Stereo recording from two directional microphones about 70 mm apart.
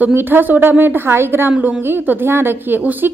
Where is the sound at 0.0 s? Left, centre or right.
Right.